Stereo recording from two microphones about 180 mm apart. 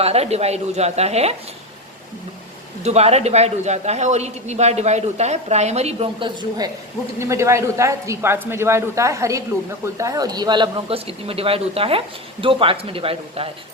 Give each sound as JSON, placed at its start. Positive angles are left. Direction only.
{"t": 0.0, "sound": "a man's voice", "side_deg": -35}
{"t": 2.8, "sound": "a man's voice", "side_deg": -35}
{"t": 7.2, "sound": "a man's voice", "side_deg": -15}